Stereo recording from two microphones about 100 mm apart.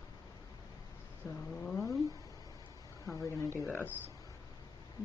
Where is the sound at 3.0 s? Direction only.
30° left (ahead or behind).